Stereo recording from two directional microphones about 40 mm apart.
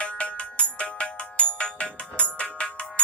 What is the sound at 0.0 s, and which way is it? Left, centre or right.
Ringtone, left.